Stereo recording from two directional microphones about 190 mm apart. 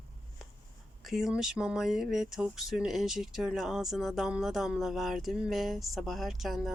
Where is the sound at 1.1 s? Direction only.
Centre (ahead or behind).